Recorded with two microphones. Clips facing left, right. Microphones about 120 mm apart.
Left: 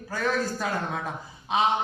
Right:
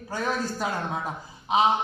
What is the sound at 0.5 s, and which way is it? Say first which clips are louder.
Speech: even; 15° right (ahead or behind).